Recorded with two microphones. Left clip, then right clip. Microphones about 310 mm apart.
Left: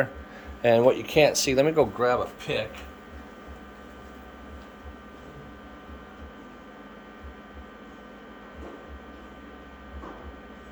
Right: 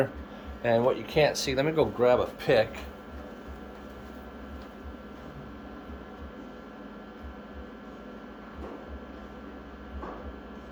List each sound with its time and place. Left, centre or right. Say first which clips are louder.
0.6 s speech: left 5 dB; left
2.0 s speech: right 1 dB; centre
2.4 s speech: right 6 dB; centre